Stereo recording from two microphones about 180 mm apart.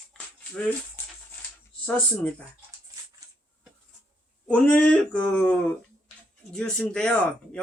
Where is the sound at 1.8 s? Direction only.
5° left (ahead or behind).